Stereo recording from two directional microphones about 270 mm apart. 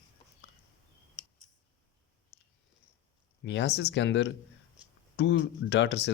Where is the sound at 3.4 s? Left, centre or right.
Left.